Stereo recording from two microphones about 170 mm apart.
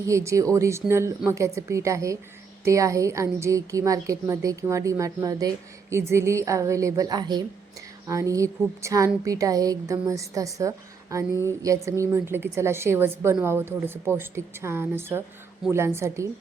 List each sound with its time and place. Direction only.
0.0 s a woman's voice: 15° right (ahead or behind)